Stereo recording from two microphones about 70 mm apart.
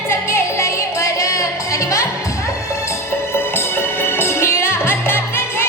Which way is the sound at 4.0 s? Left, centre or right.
Left.